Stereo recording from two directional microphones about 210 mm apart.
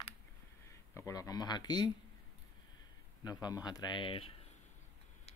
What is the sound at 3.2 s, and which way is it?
Speech, 20° left (ahead or behind).